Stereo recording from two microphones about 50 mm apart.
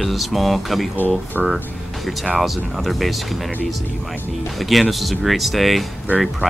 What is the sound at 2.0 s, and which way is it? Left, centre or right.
Speech, centre.